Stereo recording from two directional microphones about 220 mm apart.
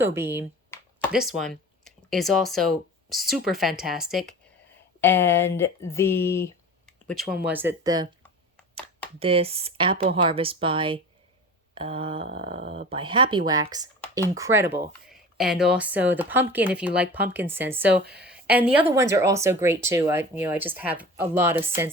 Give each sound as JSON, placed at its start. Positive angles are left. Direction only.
{"t": 0.0, "sound": "speech", "side_deg": -10}
{"t": 0.7, "sound": "a sound", "side_deg": 10}
{"t": 1.1, "sound": "speech", "side_deg": 0}
{"t": 4.9, "sound": "speech", "side_deg": 10}
{"t": 9.1, "sound": "speech", "side_deg": -25}
{"t": 15.0, "sound": "speech", "side_deg": 0}
{"t": 17.9, "sound": "speech", "side_deg": -50}
{"t": 18.4, "sound": "speech", "side_deg": -5}